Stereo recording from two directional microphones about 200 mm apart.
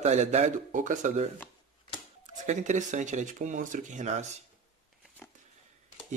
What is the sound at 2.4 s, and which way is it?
Speech, 40° right (ahead or behind).